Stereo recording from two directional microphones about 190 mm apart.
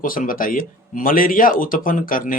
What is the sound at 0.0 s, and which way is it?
A man's voice, 45° left (ahead or behind).